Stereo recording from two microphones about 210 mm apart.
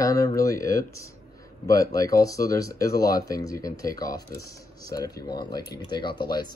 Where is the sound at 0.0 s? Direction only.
15° left (ahead or behind).